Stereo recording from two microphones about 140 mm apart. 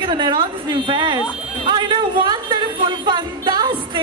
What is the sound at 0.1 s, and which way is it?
Speech, 35° right (ahead or behind).